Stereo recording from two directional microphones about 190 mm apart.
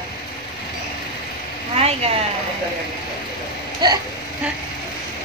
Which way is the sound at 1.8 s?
30° right (ahead or behind).